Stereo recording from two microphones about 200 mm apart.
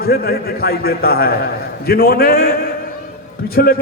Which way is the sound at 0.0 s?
50° left (ahead or behind).